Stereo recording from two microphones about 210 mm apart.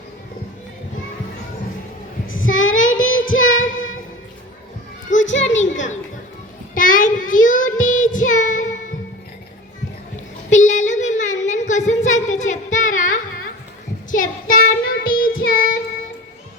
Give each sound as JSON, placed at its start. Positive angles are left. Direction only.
{"t": 2.2, "sound": "child singing", "side_deg": 70}
{"t": 5.2, "sound": "a sound", "side_deg": 60}
{"t": 6.7, "sound": "child singing", "side_deg": 40}
{"t": 10.5, "sound": "child singing", "side_deg": 35}